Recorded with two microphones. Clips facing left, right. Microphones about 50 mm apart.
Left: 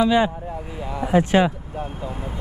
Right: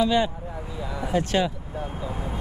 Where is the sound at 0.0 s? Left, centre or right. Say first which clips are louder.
Left 4 dB; centre.